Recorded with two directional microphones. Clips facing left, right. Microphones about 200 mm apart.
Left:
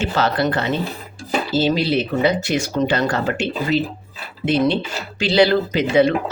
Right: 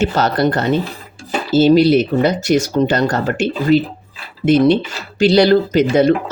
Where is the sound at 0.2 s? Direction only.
45° right (ahead or behind).